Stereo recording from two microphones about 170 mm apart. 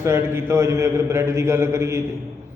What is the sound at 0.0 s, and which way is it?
A man's voice, 15° right (ahead or behind).